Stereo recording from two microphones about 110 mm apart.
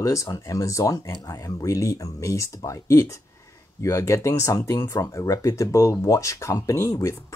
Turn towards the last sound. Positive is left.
turn(degrees=25)  # may be behind; listen again after turning